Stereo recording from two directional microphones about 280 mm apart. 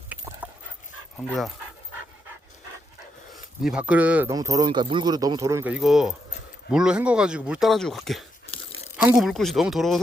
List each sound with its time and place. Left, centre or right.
0.4 s dog: centre
3.3 s speech: centre
8.4 s tearing: left
9.0 s speech: centre